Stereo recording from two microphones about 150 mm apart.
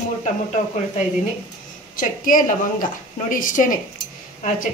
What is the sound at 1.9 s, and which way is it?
A woman's voice, 65° left (ahead or behind).